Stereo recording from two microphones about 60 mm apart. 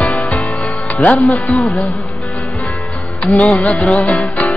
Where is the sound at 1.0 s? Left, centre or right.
Left.